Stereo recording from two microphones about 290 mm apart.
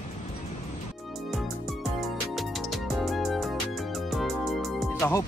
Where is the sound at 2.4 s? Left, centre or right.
Centre.